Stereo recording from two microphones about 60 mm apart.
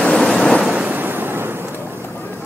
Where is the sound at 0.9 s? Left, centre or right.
Right.